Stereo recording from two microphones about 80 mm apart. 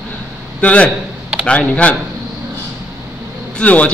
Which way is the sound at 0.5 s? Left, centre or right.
Centre.